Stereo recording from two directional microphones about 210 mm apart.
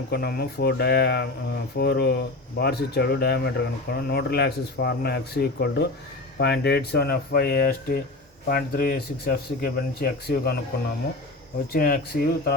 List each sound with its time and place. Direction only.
0.1 s speech: 50° left (ahead or behind)
11.7 s speech: 45° left (ahead or behind)